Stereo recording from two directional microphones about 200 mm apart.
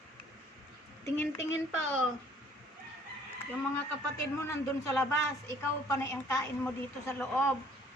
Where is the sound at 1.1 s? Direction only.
10° left (ahead or behind).